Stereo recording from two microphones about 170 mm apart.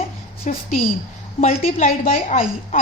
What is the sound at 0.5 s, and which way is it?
A woman's voice, 45° left (ahead or behind).